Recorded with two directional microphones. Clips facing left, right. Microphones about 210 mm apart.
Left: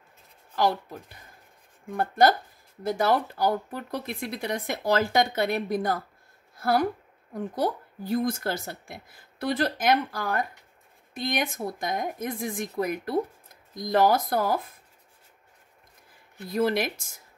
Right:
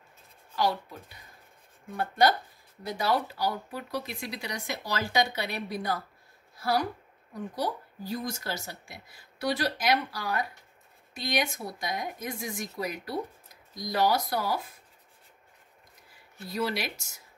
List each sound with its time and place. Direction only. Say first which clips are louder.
0.6 s a woman's voice: left 3 dB; 50° left (ahead or behind)
16.5 s speech: left 6 dB; 50° left (ahead or behind)